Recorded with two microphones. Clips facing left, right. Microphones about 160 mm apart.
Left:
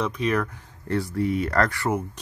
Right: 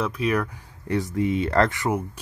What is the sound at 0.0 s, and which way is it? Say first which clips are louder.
Speech: even; 5° right (ahead or behind).